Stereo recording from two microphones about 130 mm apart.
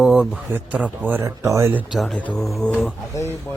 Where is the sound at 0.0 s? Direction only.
5° right (ahead or behind).